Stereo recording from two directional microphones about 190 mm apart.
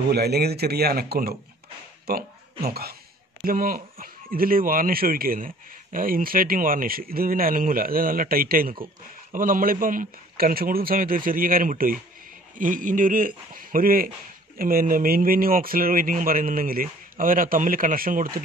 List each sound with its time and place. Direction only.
0.1 s speech: 55° right (ahead or behind)